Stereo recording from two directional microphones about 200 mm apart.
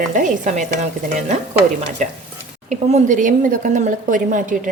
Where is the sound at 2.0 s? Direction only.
40° right (ahead or behind).